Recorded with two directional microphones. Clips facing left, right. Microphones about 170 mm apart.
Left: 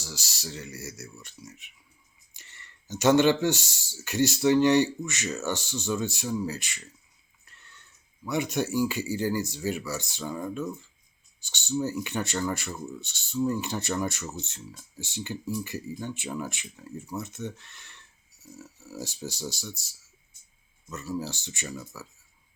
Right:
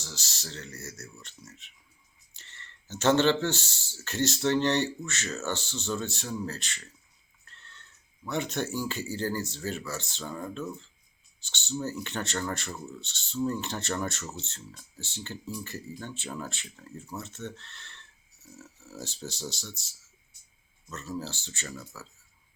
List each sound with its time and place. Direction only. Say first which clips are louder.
0.0 s speech: left 3 dB; 10° left (ahead or behind)
20.9 s speech: left 3 dB; 10° left (ahead or behind)